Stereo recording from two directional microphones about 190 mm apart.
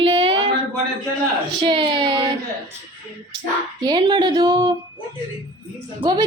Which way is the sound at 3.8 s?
25° right (ahead or behind).